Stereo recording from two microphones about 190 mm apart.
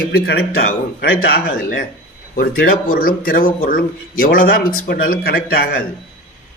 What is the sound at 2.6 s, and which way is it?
A man's voice, 50° left (ahead or behind).